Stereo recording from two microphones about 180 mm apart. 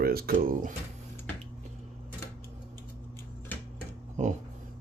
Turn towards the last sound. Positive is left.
turn(degrees=-40)  # may be behind; listen again after turning